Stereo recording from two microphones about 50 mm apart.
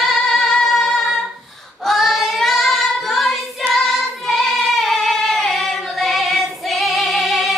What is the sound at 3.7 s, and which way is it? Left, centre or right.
Singing, centre.